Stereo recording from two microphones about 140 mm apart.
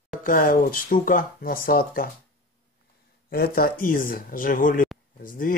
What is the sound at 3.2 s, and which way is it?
Speech, 90° left.